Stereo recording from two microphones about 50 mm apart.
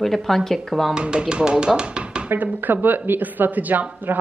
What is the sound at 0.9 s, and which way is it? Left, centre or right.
Speech, centre.